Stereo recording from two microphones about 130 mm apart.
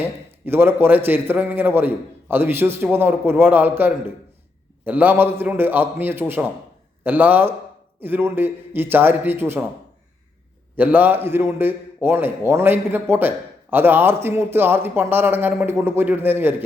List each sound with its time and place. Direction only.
0.4 s speech: 15° right (ahead or behind)
10.8 s speech: 15° right (ahead or behind)